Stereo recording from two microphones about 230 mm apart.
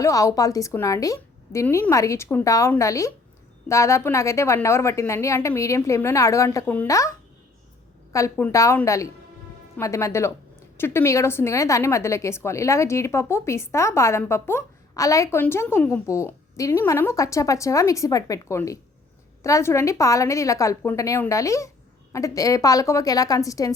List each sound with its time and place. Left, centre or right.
0.0 s a woman's voice: centre